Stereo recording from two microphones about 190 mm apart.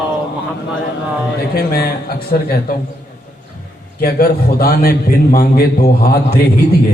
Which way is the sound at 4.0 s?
55° left (ahead or behind).